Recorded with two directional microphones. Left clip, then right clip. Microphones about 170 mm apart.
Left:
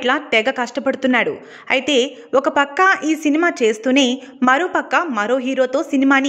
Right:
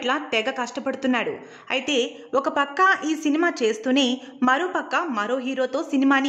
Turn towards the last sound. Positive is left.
turn(degrees=25)  # may be behind; listen again after turning